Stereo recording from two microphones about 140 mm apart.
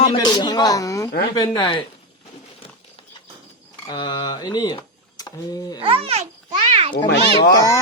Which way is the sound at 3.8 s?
30° left (ahead or behind).